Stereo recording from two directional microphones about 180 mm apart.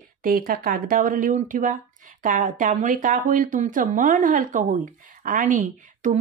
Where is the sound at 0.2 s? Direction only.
55° right (ahead or behind).